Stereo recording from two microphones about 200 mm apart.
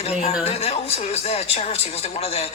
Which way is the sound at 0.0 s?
30° left (ahead or behind).